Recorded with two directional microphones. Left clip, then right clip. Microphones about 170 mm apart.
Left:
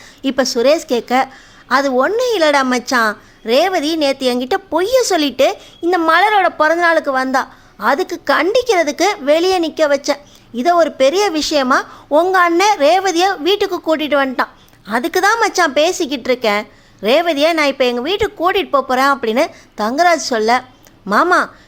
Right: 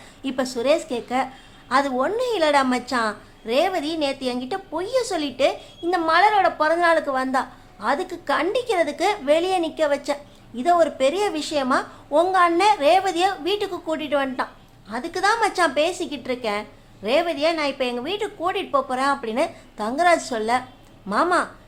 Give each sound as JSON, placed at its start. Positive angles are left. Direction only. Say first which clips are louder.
{"t": 0.2, "sound": "a woman's voice", "louder": "left 10 dB", "side_deg": 35}
{"t": 14.8, "sound": "a woman's voice", "louder": "left 8 dB", "side_deg": 45}